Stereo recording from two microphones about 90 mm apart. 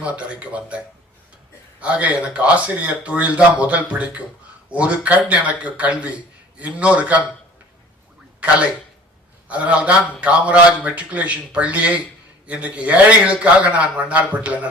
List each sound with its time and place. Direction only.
0.0 s a man's voice: 15° right (ahead or behind)
1.8 s a man's voice: 15° right (ahead or behind)
9.5 s a man's voice: 15° right (ahead or behind)